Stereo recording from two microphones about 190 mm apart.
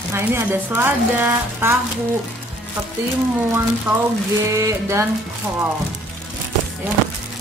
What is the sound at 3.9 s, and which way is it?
Dishes, 10° right (ahead or behind).